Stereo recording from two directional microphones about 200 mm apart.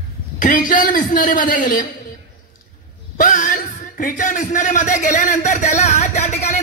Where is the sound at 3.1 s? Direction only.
40° left (ahead or behind).